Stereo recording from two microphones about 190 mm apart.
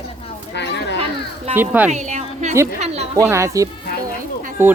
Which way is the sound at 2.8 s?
35° right (ahead or behind).